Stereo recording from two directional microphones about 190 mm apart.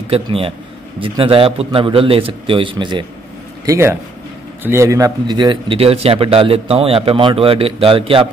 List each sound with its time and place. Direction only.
0.1 s speech: 30° right (ahead or behind)